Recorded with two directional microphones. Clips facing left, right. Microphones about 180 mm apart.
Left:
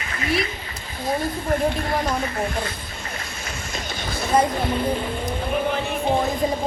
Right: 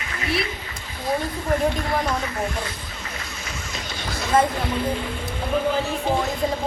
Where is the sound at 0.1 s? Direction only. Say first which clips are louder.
Left 2 dB; 45° left (ahead or behind).